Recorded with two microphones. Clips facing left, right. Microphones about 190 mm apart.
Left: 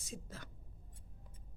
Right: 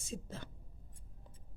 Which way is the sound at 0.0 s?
25° right (ahead or behind).